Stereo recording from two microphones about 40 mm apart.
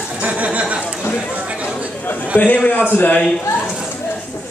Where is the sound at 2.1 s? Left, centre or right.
Left.